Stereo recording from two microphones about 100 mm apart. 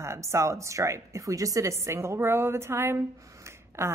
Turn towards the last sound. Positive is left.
turn(degrees=-25)  # may be behind; listen again after turning